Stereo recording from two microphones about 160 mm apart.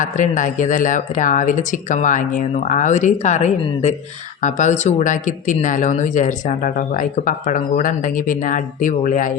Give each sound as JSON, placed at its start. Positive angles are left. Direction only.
{"t": 0.0, "sound": "speech", "side_deg": 55}